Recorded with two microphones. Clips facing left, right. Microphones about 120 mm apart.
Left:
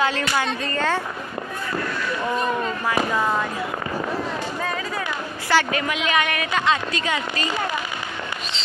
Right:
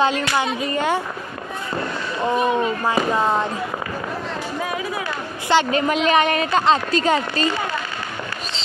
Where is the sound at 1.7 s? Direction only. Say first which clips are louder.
Right 1 dB; 25° right (ahead or behind).